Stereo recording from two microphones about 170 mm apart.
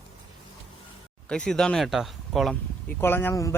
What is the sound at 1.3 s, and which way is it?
A man's voice, 5° left (ahead or behind).